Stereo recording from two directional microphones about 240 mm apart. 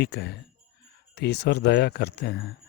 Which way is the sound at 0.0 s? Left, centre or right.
Left.